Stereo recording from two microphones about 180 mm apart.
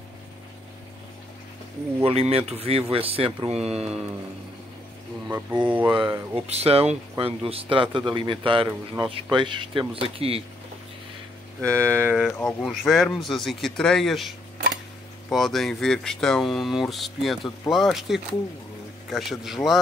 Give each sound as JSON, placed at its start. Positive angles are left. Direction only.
{"t": 2.0, "sound": "speech", "side_deg": -35}
{"t": 5.3, "sound": "speech", "side_deg": -5}
{"t": 5.9, "sound": "speech", "side_deg": -25}
{"t": 6.4, "sound": "speech", "side_deg": -35}
{"t": 11.6, "sound": "speech", "side_deg": -15}